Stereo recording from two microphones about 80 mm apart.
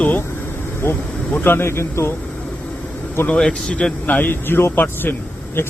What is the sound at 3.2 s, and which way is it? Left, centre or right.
Speech, centre.